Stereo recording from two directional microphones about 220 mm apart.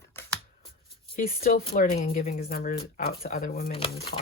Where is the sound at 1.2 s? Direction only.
40° left (ahead or behind).